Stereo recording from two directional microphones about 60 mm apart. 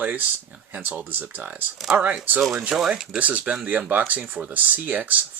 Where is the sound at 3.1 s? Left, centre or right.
Right.